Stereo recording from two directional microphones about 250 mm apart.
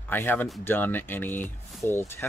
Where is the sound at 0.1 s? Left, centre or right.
Centre.